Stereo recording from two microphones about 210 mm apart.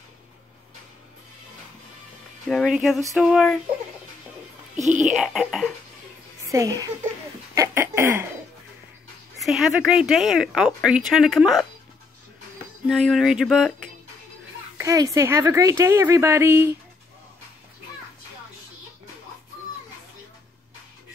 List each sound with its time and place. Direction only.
2.4 s speech: centre (ahead or behind)
5.0 s speech: centre (ahead or behind)
6.4 s a woman's voice: 15° right (ahead or behind)
7.5 s a sound: 15° right (ahead or behind)
9.4 s speech: centre (ahead or behind)
12.8 s speech: centre (ahead or behind)
14.8 s a woman's voice: 15° right (ahead or behind)